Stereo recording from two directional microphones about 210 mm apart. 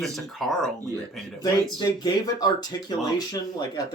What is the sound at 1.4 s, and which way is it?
Speech, 20° left (ahead or behind).